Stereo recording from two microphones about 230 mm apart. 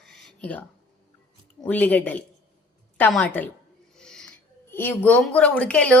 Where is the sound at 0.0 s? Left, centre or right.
Centre.